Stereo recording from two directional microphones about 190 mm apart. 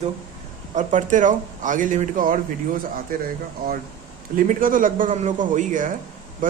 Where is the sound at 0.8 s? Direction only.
40° right (ahead or behind).